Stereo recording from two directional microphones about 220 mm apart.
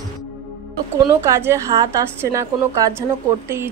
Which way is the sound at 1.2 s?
10° right (ahead or behind).